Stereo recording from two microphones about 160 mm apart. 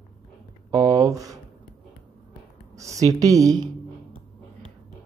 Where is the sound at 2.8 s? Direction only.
20° right (ahead or behind).